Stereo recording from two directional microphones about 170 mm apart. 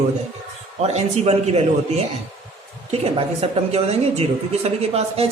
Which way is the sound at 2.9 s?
35° right (ahead or behind).